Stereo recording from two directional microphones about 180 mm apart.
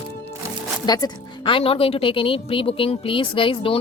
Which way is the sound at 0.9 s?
20° left (ahead or behind).